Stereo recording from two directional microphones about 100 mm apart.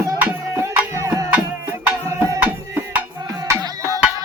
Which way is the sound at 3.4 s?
35° right (ahead or behind).